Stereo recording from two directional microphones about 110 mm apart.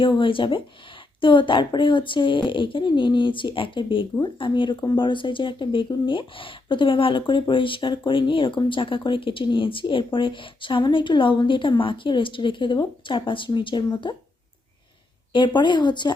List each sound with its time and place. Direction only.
0.0 s a woman's voice: 50° left (ahead or behind)
15.3 s a woman's voice: 45° left (ahead or behind)